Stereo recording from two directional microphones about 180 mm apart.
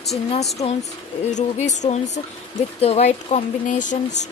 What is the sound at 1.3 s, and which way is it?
Speech, 40° left (ahead or behind).